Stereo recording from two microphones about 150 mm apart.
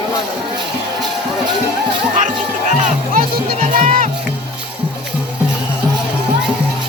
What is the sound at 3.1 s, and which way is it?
Music, 50° right (ahead or behind).